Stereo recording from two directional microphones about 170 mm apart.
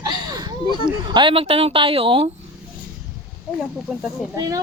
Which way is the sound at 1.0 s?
30° right (ahead or behind).